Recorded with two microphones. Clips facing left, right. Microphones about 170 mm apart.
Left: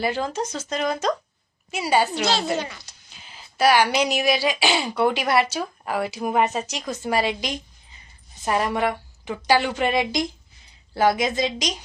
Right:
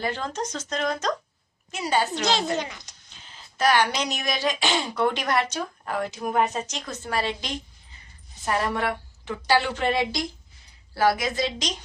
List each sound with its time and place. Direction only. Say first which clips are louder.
0.0 s speech: left 4 dB; 10° left (ahead or behind)
2.6 s speech: left 1 dB; 15° right (ahead or behind)
3.1 s a woman's voice: left 5 dB; 10° left (ahead or behind)